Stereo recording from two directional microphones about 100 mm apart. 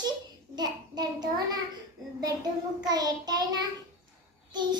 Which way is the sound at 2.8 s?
40° right (ahead or behind).